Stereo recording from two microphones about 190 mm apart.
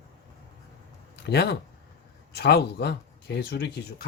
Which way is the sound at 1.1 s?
60° left (ahead or behind).